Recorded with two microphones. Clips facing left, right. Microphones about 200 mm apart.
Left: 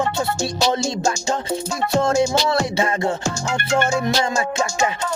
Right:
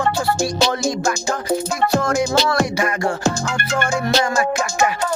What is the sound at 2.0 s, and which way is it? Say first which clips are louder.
Music: left 3 dB; 25° left (ahead or behind).